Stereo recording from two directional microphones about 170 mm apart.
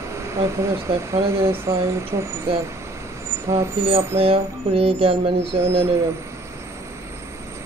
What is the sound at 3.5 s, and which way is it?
Speech, 15° right (ahead or behind).